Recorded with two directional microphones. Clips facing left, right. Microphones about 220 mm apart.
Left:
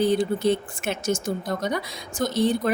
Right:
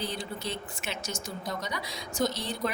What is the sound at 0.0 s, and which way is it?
Speech, 50° left (ahead or behind).